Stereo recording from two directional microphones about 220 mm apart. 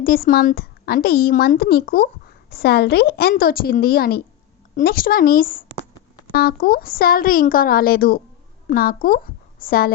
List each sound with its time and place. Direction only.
0.0 s a woman's voice: 40° left (ahead or behind)